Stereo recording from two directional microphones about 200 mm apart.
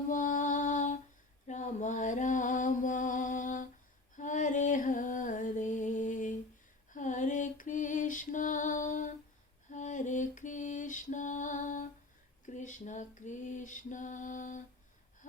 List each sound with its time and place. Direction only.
0.1 s mantra: 40° left (ahead or behind)
4.2 s music: 40° left (ahead or behind)
9.6 s lullaby: 40° left (ahead or behind)
12.5 s female singing: 35° left (ahead or behind)